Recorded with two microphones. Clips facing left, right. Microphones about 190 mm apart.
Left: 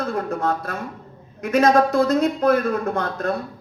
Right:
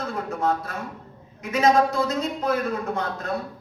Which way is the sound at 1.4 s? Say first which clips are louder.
Left 3 dB; 55° left (ahead or behind).